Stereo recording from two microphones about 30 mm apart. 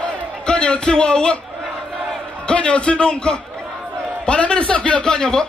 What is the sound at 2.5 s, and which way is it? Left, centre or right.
A man's voice, left.